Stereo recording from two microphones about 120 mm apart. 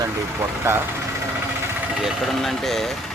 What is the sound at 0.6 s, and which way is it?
Speech, 20° right (ahead or behind).